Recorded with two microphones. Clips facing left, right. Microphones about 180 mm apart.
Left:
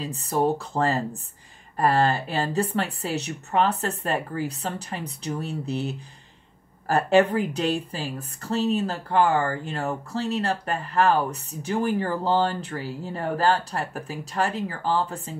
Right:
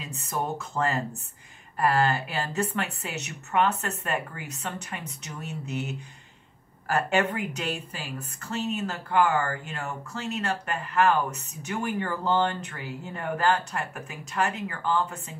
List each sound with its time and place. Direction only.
0.0 s speech: 35° left (ahead or behind)